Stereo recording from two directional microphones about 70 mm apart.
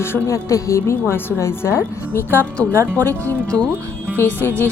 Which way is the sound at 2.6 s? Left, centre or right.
Left.